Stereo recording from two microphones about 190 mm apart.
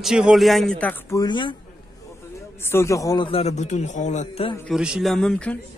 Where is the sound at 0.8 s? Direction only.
15° left (ahead or behind).